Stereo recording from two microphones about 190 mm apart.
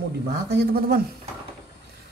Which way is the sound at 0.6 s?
55° right (ahead or behind).